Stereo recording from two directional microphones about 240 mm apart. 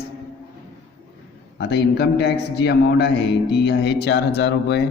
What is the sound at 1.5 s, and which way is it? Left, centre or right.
A man's voice, left.